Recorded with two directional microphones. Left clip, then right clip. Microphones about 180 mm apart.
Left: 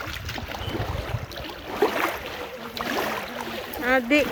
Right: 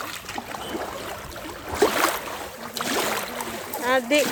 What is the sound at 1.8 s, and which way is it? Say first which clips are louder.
Boat: right 3 dB; 65° right (ahead or behind).